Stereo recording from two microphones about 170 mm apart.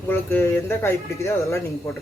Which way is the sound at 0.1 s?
15° left (ahead or behind).